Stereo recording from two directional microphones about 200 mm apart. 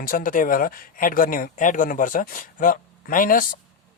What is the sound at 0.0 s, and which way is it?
Speech, 45° left (ahead or behind).